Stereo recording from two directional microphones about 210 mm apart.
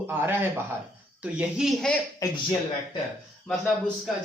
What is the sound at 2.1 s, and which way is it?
Speech, 15° left (ahead or behind).